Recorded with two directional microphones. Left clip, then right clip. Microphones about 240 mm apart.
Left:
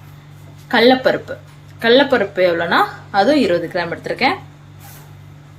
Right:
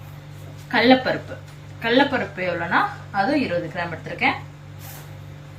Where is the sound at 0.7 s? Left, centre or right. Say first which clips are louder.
Left 5 dB; left.